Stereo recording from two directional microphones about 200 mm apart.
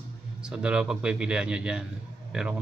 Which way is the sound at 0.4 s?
5° right (ahead or behind).